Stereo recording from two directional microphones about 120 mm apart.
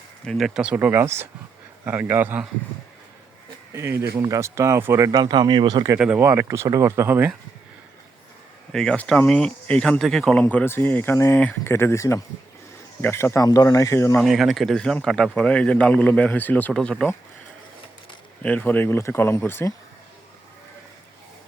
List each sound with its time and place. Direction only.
0.3 s speech: centre (ahead or behind)
3.7 s speech: 20° right (ahead or behind)
8.7 s a man's voice: 5° left (ahead or behind); by 14.2 s 25° left (ahead or behind)
14.2 s a man's voice: centre (ahead or behind)
18.4 s a man's voice: 15° left (ahead or behind)